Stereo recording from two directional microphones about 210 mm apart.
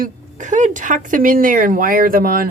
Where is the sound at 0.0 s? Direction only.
35° right (ahead or behind).